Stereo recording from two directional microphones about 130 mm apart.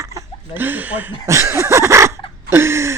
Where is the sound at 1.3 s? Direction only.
20° right (ahead or behind).